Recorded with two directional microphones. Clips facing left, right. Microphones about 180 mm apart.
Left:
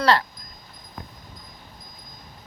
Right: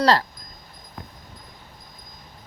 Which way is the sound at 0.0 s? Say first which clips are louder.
Right 1 dB; 35° right (ahead or behind).